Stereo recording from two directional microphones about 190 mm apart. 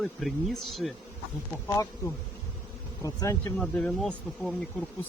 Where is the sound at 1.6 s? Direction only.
15° left (ahead or behind).